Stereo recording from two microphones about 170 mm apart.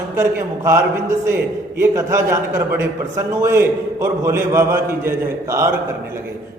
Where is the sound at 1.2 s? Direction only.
15° right (ahead or behind).